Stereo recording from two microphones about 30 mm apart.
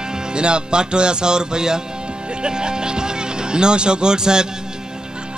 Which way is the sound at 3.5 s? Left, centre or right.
Right.